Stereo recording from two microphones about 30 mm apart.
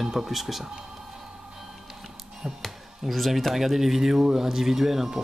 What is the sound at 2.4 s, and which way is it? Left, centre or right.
Speech, centre.